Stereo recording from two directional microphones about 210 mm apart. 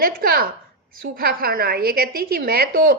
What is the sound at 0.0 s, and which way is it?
A woman's voice, 45° right (ahead or behind).